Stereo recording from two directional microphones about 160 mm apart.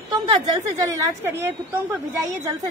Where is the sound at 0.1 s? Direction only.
25° right (ahead or behind).